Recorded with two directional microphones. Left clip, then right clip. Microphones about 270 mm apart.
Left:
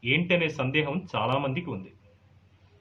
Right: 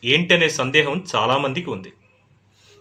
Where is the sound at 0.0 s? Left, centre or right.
Centre.